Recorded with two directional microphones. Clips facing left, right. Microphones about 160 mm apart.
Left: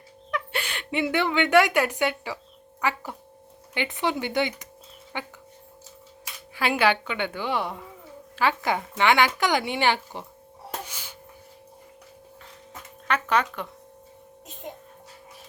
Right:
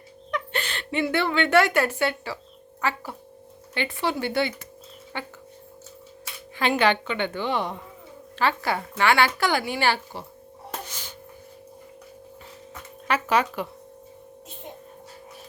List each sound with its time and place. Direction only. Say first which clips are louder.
0.3 s a woman's voice: right 1 dB; 5° left (ahead or behind)
6.6 s a woman's voice: right 1 dB; 10° left (ahead or behind)
10.8 s music: right 2 dB; 10° left (ahead or behind)
13.1 s speech: right 1 dB; 5° right (ahead or behind)